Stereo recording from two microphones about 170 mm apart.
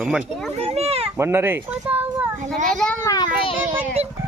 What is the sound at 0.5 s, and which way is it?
Speech, 40° right (ahead or behind).